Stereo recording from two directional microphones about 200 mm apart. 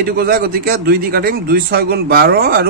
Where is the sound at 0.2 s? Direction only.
50° right (ahead or behind).